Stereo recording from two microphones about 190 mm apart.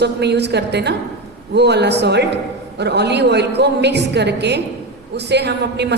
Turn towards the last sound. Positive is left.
turn(degrees=-60)  # may be behind; listen again after turning